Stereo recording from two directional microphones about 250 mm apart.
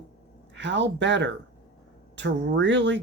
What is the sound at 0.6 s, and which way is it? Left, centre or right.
Speech, right.